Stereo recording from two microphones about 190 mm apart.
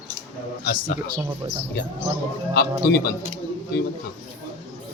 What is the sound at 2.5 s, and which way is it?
Speech, 55° left (ahead or behind).